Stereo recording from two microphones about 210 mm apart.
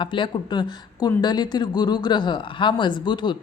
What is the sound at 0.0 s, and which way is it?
A woman's voice, 25° left (ahead or behind).